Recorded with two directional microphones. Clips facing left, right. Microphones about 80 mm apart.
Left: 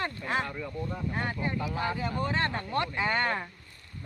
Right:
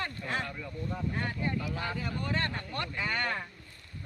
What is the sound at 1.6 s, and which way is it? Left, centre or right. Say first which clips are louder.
Speech: left 4 dB; centre.